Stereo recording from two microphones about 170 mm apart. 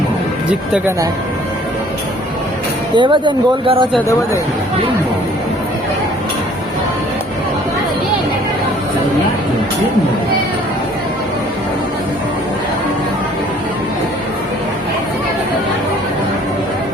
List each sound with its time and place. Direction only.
2.9 s speech: 30° right (ahead or behind)